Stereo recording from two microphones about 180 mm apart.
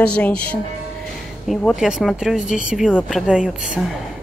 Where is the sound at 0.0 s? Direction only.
5° left (ahead or behind).